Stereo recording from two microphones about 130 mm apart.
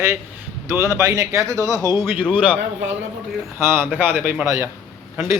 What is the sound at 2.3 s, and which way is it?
Speech, 15° right (ahead or behind).